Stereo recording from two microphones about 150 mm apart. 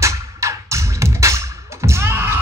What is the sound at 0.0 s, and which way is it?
Music, 20° right (ahead or behind).